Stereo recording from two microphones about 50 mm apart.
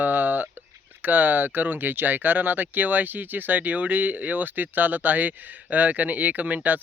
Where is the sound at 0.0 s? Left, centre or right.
Right.